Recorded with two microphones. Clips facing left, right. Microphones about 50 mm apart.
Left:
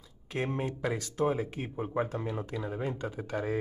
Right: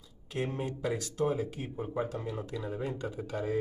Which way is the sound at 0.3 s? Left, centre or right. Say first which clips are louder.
Left 2 dB; left.